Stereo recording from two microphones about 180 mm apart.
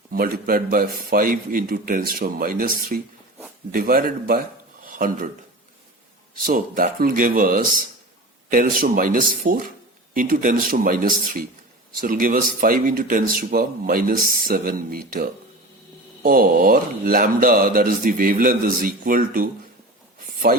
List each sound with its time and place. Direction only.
0.1 s speech: 50° right (ahead or behind)
4.8 s a sound: 50° right (ahead or behind)
6.4 s speech: 50° right (ahead or behind)